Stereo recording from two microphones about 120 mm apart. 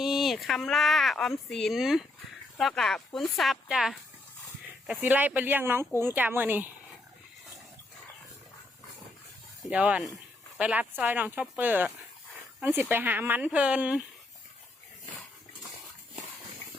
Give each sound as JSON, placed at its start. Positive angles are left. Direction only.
{"t": 0.0, "sound": "speech", "side_deg": 0}
{"t": 4.9, "sound": "speech", "side_deg": -15}
{"t": 9.6, "sound": "speech", "side_deg": -10}